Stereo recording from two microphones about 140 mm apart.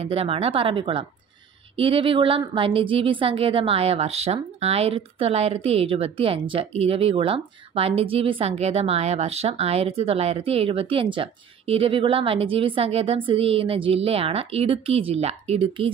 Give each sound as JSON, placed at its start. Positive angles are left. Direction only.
{"t": 0.0, "sound": "a woman's voice", "side_deg": -45}